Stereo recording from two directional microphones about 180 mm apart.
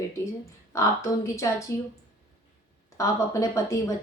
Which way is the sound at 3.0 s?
15° left (ahead or behind).